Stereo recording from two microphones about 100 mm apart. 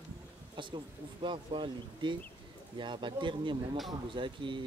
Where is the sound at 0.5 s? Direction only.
55° right (ahead or behind).